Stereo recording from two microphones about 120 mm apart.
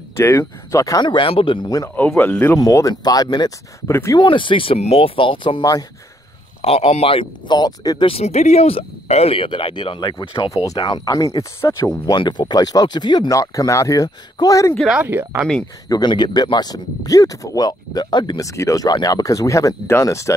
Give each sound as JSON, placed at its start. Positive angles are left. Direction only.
{"t": 0.1, "sound": "speech", "side_deg": 20}
{"t": 1.0, "sound": "speech", "side_deg": 45}
{"t": 2.1, "sound": "speech", "side_deg": 15}
{"t": 2.6, "sound": "speech", "side_deg": 30}
{"t": 3.8, "sound": "speech", "side_deg": 20}
{"t": 4.2, "sound": "speech", "side_deg": 45}
{"t": 6.6, "sound": "speech", "side_deg": 55}
{"t": 8.1, "sound": "speech", "side_deg": 60}
{"t": 15.0, "sound": "speech", "side_deg": -15}
{"t": 15.9, "sound": "speech", "side_deg": 35}
{"t": 18.4, "sound": "speech", "side_deg": 25}